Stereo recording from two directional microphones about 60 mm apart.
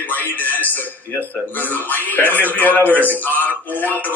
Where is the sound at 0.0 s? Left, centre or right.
Left.